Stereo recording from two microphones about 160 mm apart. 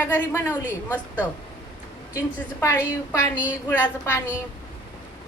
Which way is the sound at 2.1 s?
15° left (ahead or behind).